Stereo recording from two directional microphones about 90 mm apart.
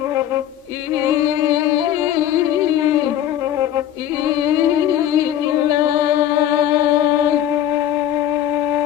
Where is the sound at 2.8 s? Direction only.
35° right (ahead or behind).